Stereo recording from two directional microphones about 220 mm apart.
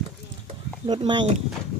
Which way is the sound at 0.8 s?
20° right (ahead or behind).